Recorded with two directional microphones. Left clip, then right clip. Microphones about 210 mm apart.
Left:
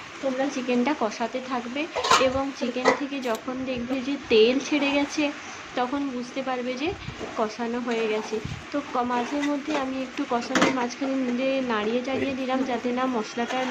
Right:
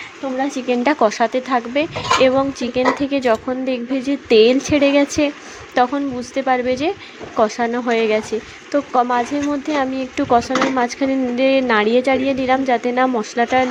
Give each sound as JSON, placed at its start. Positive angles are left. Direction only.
{"t": 0.5, "sound": "speech", "side_deg": -35}